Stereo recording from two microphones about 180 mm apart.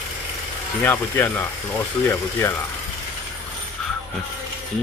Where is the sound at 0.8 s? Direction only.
10° left (ahead or behind).